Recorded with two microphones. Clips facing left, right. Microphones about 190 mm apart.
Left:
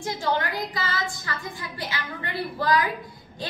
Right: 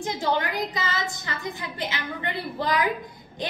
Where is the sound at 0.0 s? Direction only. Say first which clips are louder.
Right 1 dB; 20° right (ahead or behind).